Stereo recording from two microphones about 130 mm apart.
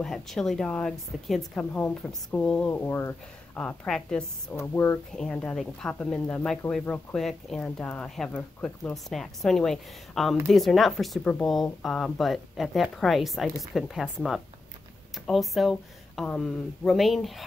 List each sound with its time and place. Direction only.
0.0 s a woman's voice: 5° left (ahead or behind)
3.6 s a woman's voice: 5° left (ahead or behind)
4.6 s a woman's voice: 20° left (ahead or behind)
5.1 s a woman's voice: 5° left (ahead or behind)